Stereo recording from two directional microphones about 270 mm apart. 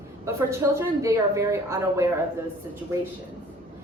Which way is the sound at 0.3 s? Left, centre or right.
Centre.